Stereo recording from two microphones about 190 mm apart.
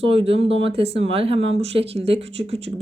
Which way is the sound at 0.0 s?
30° right (ahead or behind).